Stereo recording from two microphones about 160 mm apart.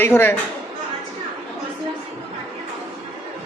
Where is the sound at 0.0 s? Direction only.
15° left (ahead or behind).